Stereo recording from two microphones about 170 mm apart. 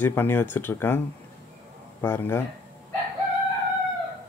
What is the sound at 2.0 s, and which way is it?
Speech, 15° left (ahead or behind).